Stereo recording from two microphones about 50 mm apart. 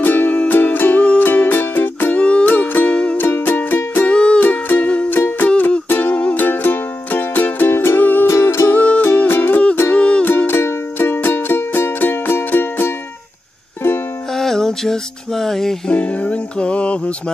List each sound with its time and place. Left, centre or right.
0.0 s music: left
2.1 s music: left
2.4 s music: left
3.2 s music: left
4.0 s music: left
5.1 s music: left
8.0 s music: left
8.3 s music: left
8.6 s music: left
9.0 s music: left
9.8 s music: left
10.2 s music: left
14.3 s music: centre
15.9 s music: left